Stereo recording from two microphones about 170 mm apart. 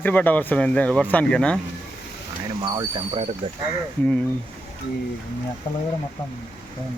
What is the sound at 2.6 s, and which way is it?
Speech, 25° right (ahead or behind).